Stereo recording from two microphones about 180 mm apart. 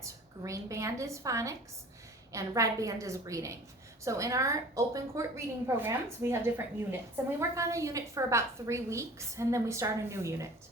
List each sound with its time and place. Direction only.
0.0 s a woman's voice: 15° right (ahead or behind)